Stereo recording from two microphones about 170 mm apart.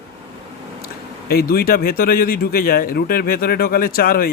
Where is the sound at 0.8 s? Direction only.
65° left (ahead or behind).